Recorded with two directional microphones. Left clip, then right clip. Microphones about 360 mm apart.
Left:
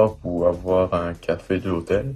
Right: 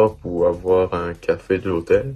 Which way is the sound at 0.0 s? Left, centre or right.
Centre.